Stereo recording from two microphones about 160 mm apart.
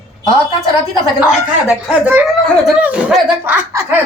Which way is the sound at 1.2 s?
10° right (ahead or behind).